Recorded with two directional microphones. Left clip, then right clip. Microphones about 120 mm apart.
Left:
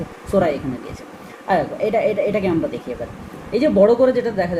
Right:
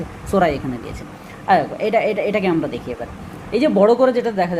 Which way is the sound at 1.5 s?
35° right (ahead or behind).